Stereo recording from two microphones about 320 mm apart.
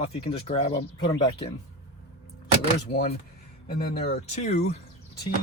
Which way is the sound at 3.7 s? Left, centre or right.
Left.